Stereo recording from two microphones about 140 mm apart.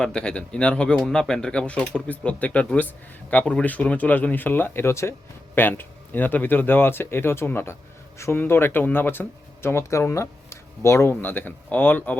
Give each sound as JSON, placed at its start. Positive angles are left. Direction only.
{"t": 0.0, "sound": "speech", "side_deg": 5}